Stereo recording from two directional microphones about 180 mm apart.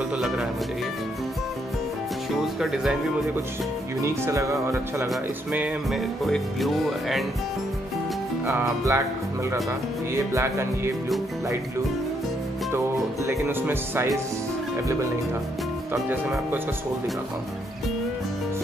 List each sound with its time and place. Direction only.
2.3 s speech: centre (ahead or behind)
4.0 s speech: 15° right (ahead or behind)
5.5 s speech: 5° right (ahead or behind)
8.5 s speech: 15° right (ahead or behind)
10.1 s speech: 15° right (ahead or behind)
12.7 s speech: 15° right (ahead or behind)